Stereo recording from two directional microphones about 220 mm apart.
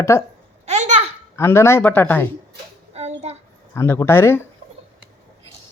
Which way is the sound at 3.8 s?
10° left (ahead or behind).